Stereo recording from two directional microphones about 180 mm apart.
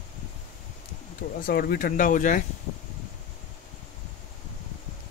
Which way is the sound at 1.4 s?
55° left (ahead or behind).